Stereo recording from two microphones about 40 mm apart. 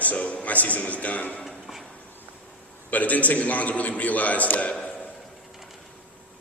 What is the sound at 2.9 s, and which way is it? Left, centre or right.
A man's voice, left.